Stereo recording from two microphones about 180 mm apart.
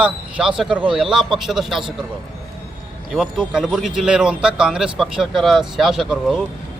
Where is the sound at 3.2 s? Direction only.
5° right (ahead or behind).